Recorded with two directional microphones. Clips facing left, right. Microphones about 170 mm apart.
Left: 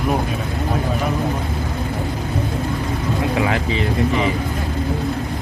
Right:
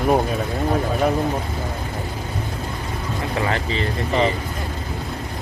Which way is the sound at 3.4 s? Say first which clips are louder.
Left 3 dB; 5° left (ahead or behind).